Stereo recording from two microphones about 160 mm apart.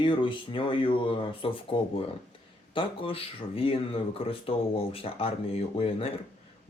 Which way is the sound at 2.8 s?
35° left (ahead or behind).